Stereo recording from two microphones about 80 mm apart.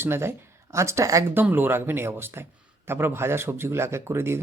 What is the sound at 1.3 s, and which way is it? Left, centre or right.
A man's voice, right.